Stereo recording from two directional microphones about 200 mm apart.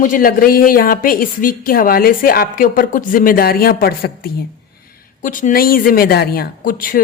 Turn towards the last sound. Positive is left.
turn(degrees=45)  # may be behind; listen again after turning